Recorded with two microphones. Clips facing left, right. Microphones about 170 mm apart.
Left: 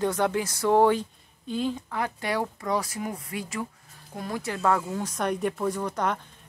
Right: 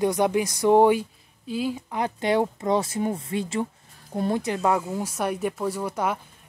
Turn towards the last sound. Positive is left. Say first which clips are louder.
# right 1 dB
turn(degrees=-5)  # may be behind; listen again after turning